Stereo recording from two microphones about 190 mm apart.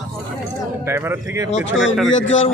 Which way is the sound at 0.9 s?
10° right (ahead or behind).